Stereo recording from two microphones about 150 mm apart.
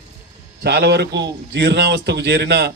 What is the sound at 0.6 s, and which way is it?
A man's voice, 90° right.